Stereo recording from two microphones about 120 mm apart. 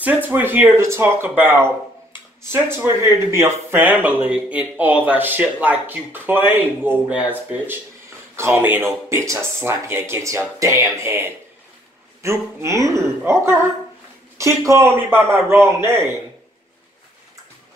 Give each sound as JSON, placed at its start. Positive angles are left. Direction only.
{"t": 0.0, "sound": "speech", "side_deg": -15}